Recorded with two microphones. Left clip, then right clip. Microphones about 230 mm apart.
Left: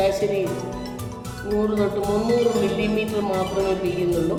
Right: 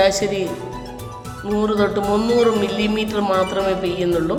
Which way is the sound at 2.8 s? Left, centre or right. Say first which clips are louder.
Right 3 dB; centre.